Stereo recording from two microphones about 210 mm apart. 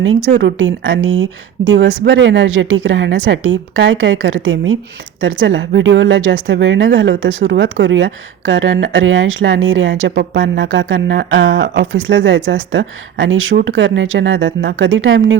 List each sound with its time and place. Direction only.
0.3 s a woman's voice: 60° right (ahead or behind)